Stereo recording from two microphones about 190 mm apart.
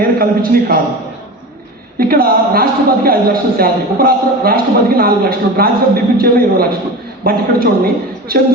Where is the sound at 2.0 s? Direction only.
50° right (ahead or behind).